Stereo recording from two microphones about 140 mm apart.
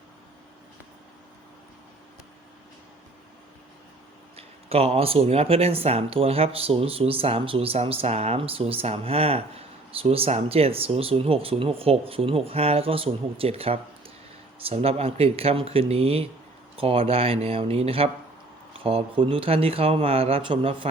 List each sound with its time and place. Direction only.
4.4 s speech: 45° right (ahead or behind)